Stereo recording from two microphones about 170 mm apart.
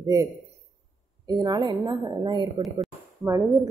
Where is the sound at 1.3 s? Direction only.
25° right (ahead or behind).